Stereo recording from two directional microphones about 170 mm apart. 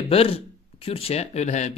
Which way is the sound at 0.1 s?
35° left (ahead or behind).